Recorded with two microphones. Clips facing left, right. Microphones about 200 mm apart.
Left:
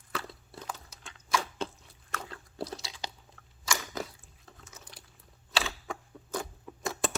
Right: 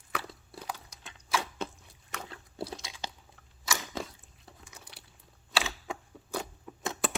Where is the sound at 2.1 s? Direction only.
15° right (ahead or behind).